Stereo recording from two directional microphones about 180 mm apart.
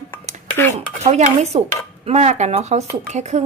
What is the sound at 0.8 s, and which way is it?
A woman's voice, 40° right (ahead or behind).